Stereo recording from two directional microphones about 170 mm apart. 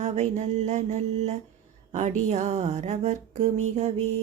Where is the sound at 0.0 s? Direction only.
40° right (ahead or behind).